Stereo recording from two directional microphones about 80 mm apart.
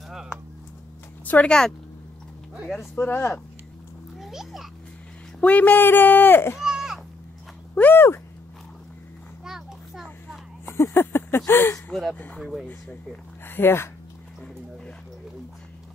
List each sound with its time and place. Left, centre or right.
0.1 s a sound: centre
1.2 s speech: centre
3.0 s speech: left
4.2 s a sound: centre
5.4 s speech: centre
6.6 s a sound: centre
7.7 s speech: left
9.4 s children playing: centre
10.6 s speech: left
11.9 s speech: centre
13.5 s speech: left